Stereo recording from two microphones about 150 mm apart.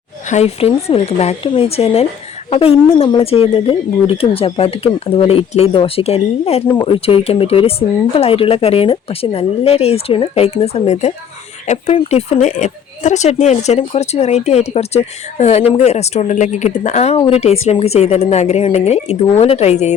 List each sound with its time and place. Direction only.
0.3 s speech: 45° left (ahead or behind)